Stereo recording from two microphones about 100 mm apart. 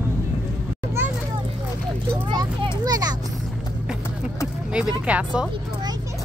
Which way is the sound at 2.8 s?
40° right (ahead or behind).